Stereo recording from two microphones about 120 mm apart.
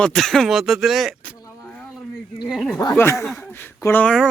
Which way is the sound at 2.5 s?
Centre (ahead or behind).